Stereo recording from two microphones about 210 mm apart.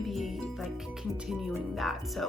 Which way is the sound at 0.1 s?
Centre (ahead or behind).